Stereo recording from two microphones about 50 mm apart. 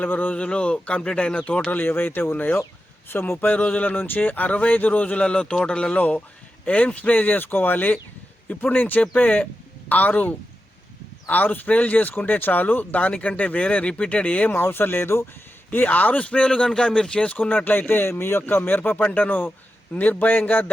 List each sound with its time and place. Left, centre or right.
0.0 s speech: left
0.3 s speech: left
1.8 s speech: left
3.1 s speech: left
3.4 s speech: left; by 5.9 s centre
5.9 s speech: left
14.5 s speech: left; by 17.2 s centre
17.7 s speech: left